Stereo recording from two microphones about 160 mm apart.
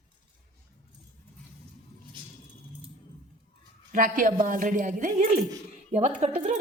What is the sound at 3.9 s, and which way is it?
Speech, 55° right (ahead or behind).